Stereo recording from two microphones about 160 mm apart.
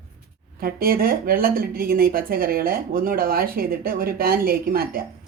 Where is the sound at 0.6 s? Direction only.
65° right (ahead or behind).